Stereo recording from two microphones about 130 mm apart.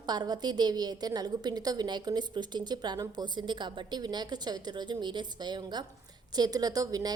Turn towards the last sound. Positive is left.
turn(degrees=-30)  # may be behind; listen again after turning